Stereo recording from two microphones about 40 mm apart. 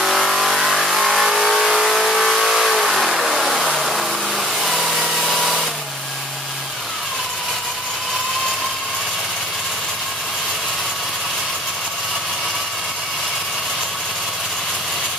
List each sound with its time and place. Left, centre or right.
0.0 s vehicle: centre